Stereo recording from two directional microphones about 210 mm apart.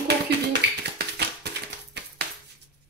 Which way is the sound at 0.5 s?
55° right (ahead or behind).